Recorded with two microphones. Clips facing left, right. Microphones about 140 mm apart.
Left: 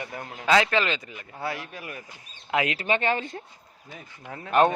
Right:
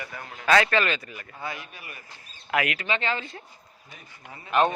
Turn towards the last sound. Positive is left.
turn(degrees=45)  # may be behind; listen again after turning